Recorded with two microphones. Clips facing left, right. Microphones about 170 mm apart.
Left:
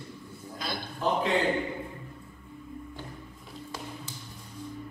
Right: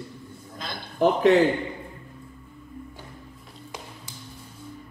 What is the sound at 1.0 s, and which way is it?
Speech, 80° right.